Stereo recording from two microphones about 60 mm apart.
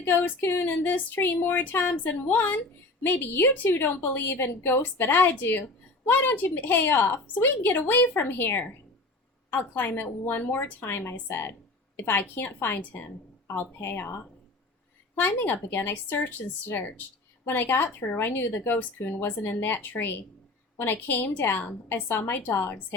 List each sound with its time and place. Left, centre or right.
0.0 s a woman's voice: left
15.4 s a woman's voice: left